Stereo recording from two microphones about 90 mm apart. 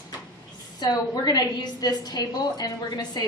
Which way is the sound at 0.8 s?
50° left (ahead or behind).